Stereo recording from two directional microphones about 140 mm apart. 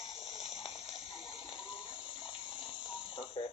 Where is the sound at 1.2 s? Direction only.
35° left (ahead or behind).